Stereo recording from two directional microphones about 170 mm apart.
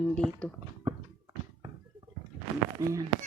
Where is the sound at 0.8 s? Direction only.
25° right (ahead or behind).